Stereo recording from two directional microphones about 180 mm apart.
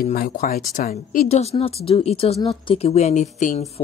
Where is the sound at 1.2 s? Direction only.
35° left (ahead or behind).